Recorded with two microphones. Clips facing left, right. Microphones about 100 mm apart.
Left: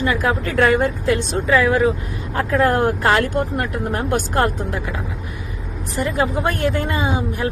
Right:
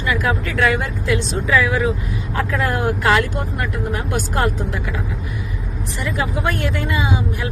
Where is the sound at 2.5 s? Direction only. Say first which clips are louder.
Left 6 dB; 40° left (ahead or behind).